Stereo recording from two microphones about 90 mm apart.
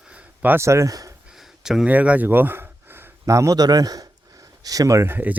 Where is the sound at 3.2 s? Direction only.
35° right (ahead or behind).